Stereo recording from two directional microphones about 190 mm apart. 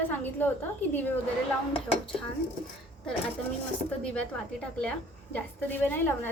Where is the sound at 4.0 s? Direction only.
5° left (ahead or behind).